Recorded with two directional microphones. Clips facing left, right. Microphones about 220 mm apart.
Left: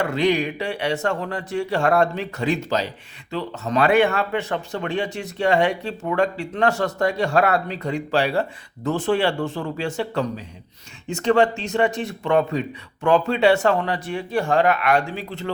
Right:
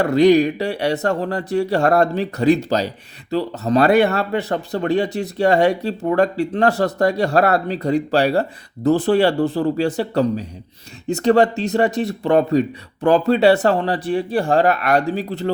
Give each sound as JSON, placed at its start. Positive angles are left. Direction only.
{"t": 0.0, "sound": "speech", "side_deg": -40}